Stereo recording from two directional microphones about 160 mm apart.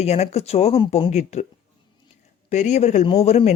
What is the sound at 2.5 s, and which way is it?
Speech, 45° left (ahead or behind).